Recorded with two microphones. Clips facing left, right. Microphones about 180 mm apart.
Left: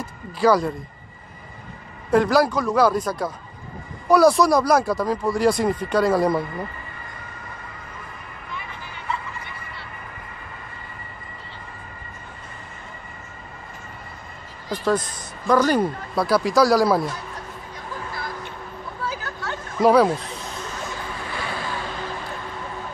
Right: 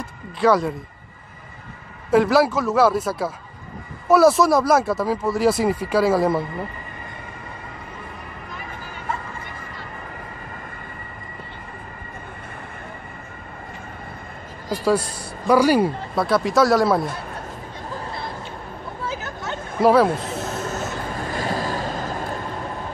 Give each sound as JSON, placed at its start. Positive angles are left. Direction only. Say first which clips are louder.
{"t": 0.0, "sound": "speech", "louder": "even", "side_deg": 0}
{"t": 2.0, "sound": "speech", "louder": "right 1 dB", "side_deg": -5}
{"t": 8.5, "sound": "music", "louder": "left 2 dB", "side_deg": -45}
{"t": 14.7, "sound": "speech", "louder": "right 2 dB", "side_deg": -10}
{"t": 19.0, "sound": "a sound", "louder": "right 1 dB", "side_deg": -20}
{"t": 19.8, "sound": "speech", "louder": "even", "side_deg": 0}
{"t": 20.3, "sound": "boat", "louder": "right 6 dB", "side_deg": -45}